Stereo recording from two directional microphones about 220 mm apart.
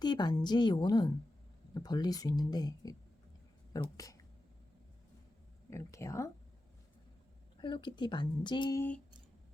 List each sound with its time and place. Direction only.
0.0 s speech: 20° left (ahead or behind)
5.7 s speech: 15° left (ahead or behind)
7.6 s speech: 20° left (ahead or behind)